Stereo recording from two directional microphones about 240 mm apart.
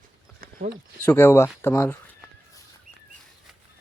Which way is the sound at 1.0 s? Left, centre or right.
Centre.